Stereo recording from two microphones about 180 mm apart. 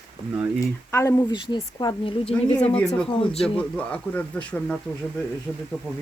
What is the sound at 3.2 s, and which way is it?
Speech, 30° left (ahead or behind).